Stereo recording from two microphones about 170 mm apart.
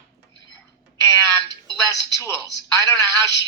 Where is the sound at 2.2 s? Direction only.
20° left (ahead or behind).